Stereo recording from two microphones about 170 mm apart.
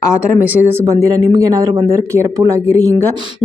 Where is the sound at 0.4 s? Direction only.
10° right (ahead or behind).